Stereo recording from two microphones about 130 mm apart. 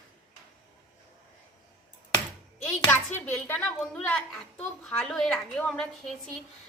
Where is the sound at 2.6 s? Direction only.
15° left (ahead or behind).